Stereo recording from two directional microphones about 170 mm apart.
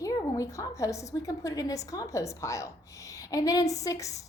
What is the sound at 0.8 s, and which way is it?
A woman's voice, 20° left (ahead or behind).